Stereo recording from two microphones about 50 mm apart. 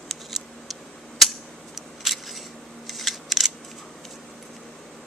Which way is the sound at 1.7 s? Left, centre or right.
Centre.